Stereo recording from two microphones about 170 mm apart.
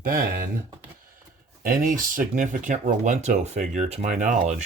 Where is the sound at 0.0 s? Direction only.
60° right (ahead or behind).